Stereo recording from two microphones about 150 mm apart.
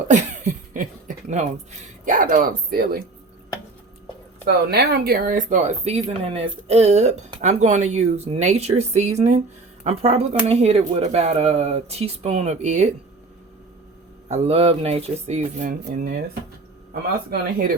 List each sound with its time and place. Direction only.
0.1 s a sound: 55° right (ahead or behind)
2.0 s speech: 65° right (ahead or behind)
4.4 s speech: 90° right; by 12.9 s 50° right (ahead or behind)
14.3 s speech: 45° right (ahead or behind); by 16.1 s 80° right